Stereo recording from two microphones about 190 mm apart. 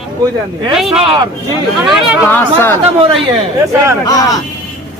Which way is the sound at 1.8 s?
Centre (ahead or behind).